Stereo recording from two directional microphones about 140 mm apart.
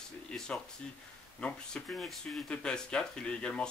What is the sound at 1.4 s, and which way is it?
Speech, 5° left (ahead or behind).